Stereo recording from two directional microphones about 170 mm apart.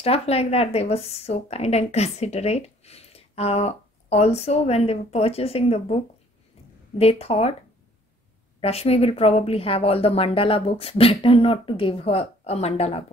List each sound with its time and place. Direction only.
0.0 s speech: 35° left (ahead or behind)
7.0 s speech: 35° left (ahead or behind)
8.5 s speech: 35° left (ahead or behind)